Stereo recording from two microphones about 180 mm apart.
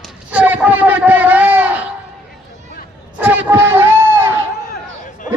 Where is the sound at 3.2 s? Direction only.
10° right (ahead or behind).